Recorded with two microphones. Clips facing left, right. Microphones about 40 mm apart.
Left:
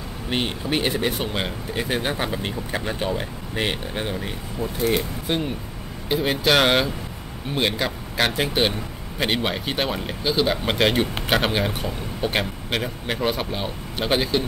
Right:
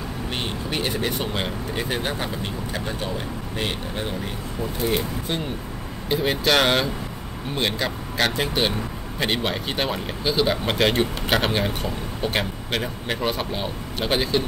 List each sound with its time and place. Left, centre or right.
0.3 s speech: centre
2.1 s speech: centre
4.1 s speech: centre